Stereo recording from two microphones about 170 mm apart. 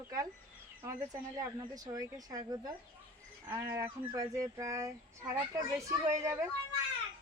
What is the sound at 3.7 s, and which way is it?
Speech, 20° right (ahead or behind).